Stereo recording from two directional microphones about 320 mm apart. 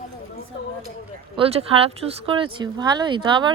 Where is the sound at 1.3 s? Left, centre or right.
Centre.